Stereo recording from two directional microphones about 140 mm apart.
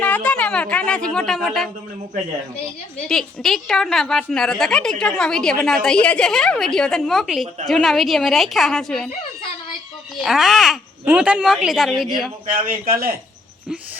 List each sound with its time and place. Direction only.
0.0 s a woman's voice: 10° left (ahead or behind)
3.1 s a woman's voice: centre (ahead or behind)
10.2 s a woman's voice: centre (ahead or behind)
12.9 s speech: 90° right